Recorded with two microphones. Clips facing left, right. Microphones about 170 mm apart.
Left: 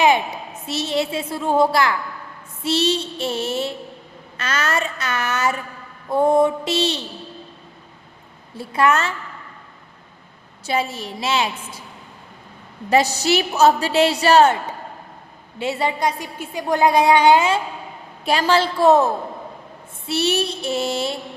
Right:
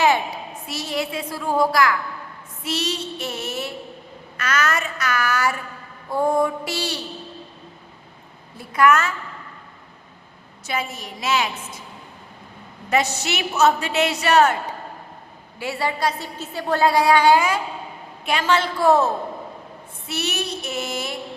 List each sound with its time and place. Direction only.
0.7 s a woman's voice: 25° left (ahead or behind)
8.5 s a woman's voice: 30° left (ahead or behind)
10.7 s a woman's voice: 30° left (ahead or behind)
12.9 s a woman's voice: 35° left (ahead or behind)
18.3 s a woman's voice: 35° left (ahead or behind)
18.9 s a woman's voice: 15° left (ahead or behind)
20.1 s a woman's voice: 30° left (ahead or behind)